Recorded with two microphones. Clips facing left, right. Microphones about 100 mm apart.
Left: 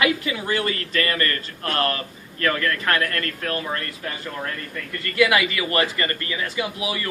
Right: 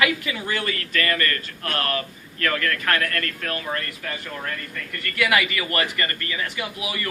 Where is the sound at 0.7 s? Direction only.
25° left (ahead or behind).